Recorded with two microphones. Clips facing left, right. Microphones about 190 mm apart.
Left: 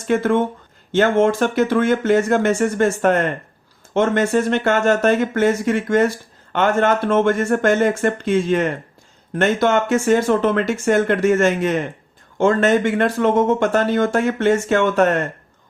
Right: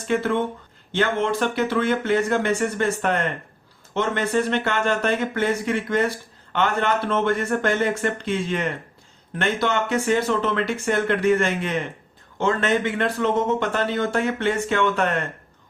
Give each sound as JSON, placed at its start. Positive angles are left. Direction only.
{"t": 0.1, "sound": "speech", "side_deg": 45}